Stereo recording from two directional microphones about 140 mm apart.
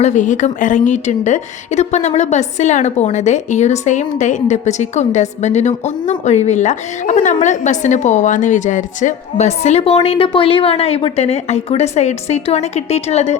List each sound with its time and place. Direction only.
0.0 s a woman's voice: 60° left (ahead or behind)